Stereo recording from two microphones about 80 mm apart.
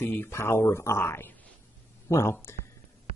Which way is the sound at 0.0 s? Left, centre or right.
Left.